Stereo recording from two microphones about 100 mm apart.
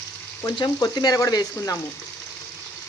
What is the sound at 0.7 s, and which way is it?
Speech, 40° left (ahead or behind).